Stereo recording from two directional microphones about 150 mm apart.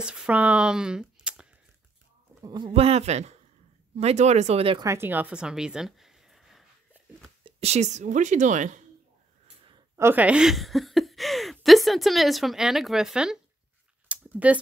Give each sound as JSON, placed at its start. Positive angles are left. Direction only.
{"t": 0.0, "sound": "speech", "side_deg": -5}
{"t": 2.4, "sound": "speech", "side_deg": -30}
{"t": 4.7, "sound": "a sound", "side_deg": -20}
{"t": 7.4, "sound": "speech", "side_deg": -45}
{"t": 9.9, "sound": "a woman's voice", "side_deg": -15}
{"t": 14.0, "sound": "a sound", "side_deg": -10}